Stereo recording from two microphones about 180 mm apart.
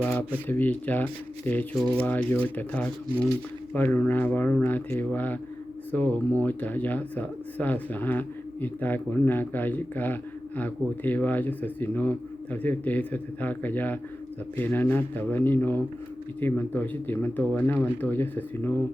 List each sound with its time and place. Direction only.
0.0 s speech: 10° left (ahead or behind)